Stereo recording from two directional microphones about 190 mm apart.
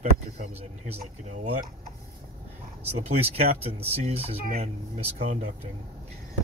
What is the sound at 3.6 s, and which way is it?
Speech, 30° right (ahead or behind).